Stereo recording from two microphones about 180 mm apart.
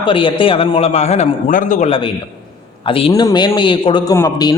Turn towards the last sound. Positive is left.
turn(degrees=20)  # may be behind; listen again after turning